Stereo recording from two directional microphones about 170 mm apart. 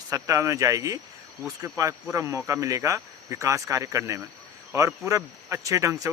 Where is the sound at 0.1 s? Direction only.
20° right (ahead or behind).